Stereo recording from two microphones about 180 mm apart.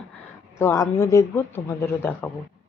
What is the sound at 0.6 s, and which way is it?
Speech, 15° left (ahead or behind).